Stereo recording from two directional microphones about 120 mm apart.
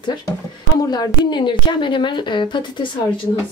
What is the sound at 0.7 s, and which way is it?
A woman's voice, 35° left (ahead or behind).